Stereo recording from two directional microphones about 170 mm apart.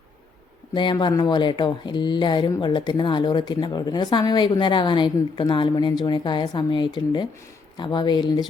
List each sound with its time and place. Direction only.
0.7 s speech: 25° left (ahead or behind)